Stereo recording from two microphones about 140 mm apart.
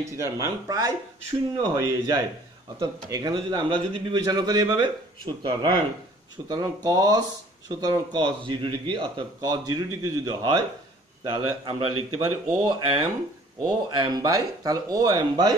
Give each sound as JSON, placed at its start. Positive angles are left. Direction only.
{"t": 0.0, "sound": "a man's voice", "side_deg": -20}